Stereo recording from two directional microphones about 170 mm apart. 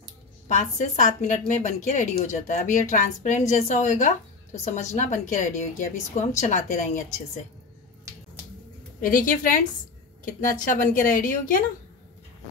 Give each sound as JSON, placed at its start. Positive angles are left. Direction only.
{"t": 0.5, "sound": "a woman's voice", "side_deg": 45}
{"t": 9.0, "sound": "a woman's voice", "side_deg": 50}